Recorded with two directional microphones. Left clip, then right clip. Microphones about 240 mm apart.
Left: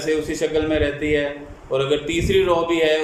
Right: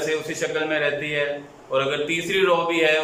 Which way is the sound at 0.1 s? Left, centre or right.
Centre.